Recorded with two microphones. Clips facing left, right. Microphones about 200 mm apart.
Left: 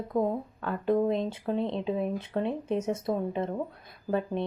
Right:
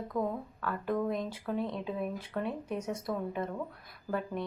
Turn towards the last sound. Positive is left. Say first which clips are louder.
# left 5 dB
turn(degrees=25)  # may be behind; listen again after turning